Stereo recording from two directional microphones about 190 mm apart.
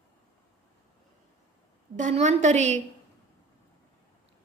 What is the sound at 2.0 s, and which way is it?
Speech, 40° right (ahead or behind).